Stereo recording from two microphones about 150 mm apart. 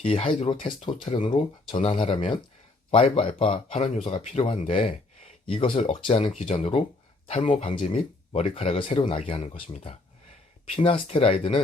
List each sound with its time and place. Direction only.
0.0 s speech: 40° left (ahead or behind)